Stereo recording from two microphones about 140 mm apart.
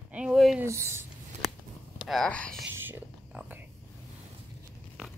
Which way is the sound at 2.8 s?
10° right (ahead or behind).